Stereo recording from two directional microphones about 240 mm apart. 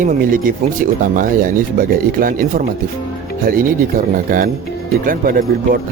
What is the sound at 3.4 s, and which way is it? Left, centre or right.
Speech, right.